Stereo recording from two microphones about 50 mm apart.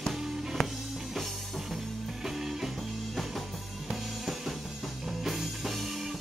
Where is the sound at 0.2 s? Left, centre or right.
Centre.